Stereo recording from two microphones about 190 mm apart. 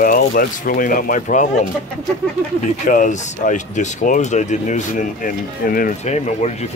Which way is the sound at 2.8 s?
40° left (ahead or behind).